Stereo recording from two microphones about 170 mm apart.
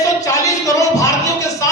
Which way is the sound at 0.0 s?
20° left (ahead or behind).